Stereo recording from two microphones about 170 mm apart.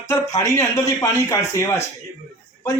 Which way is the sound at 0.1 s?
20° left (ahead or behind).